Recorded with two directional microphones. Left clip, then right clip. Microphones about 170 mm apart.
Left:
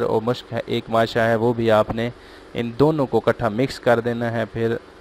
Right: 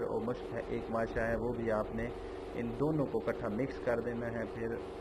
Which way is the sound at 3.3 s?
45° left (ahead or behind).